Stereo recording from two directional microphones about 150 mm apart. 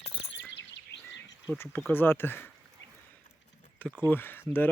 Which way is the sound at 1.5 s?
15° left (ahead or behind).